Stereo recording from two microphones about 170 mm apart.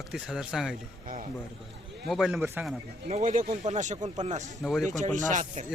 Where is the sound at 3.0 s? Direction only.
45° right (ahead or behind).